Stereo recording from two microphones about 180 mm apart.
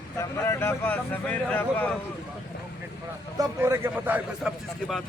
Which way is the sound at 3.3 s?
15° right (ahead or behind).